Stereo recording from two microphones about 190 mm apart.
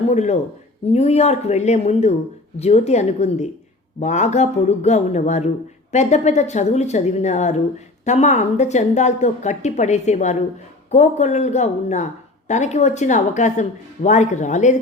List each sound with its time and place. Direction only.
0.1 s a woman's voice: 35° left (ahead or behind)